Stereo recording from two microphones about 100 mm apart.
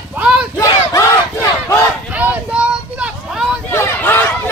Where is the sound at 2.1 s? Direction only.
15° right (ahead or behind).